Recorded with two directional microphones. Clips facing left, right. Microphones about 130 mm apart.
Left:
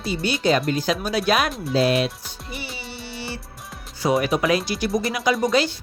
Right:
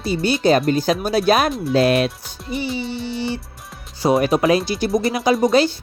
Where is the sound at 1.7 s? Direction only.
60° right (ahead or behind).